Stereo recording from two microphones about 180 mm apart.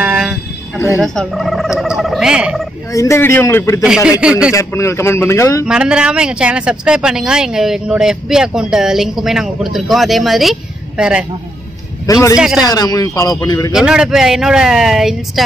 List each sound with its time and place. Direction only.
0.0 s a sound: 5° right (ahead or behind)
1.0 s speech: centre (ahead or behind)
2.9 s a man's voice: 15° left (ahead or behind)
3.8 s speech: 5° right (ahead or behind)
4.5 s a man's voice: 15° left (ahead or behind)
5.7 s speech: 5° right (ahead or behind)
12.1 s a man's voice: 15° left (ahead or behind)
12.4 s speech: centre (ahead or behind)
12.6 s speech: 20° left (ahead or behind)
13.7 s speech: 5° right (ahead or behind)